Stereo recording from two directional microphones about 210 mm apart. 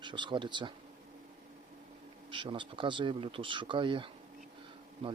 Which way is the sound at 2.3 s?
25° right (ahead or behind).